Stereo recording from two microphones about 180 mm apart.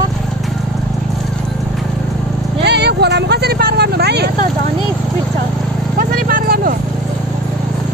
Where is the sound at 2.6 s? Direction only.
70° right (ahead or behind).